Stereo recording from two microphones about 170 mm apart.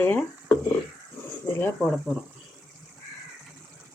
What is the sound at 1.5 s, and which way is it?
Speech, 10° left (ahead or behind).